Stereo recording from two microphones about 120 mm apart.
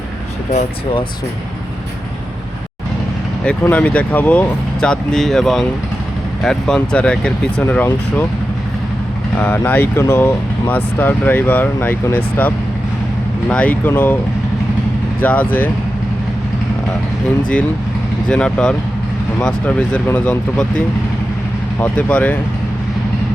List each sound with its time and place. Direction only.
3.4 s speech: 10° left (ahead or behind)
9.4 s speech: 15° left (ahead or behind)
15.2 s speech: 15° left (ahead or behind)
18.3 s speech: 10° left (ahead or behind)